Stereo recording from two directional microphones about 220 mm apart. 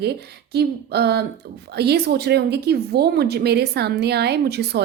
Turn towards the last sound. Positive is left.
turn(degrees=-50)  # may be behind; listen again after turning